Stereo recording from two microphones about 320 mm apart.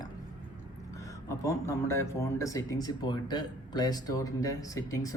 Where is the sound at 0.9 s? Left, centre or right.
Centre.